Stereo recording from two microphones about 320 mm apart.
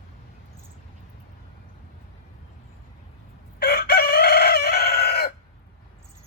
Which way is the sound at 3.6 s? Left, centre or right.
Left.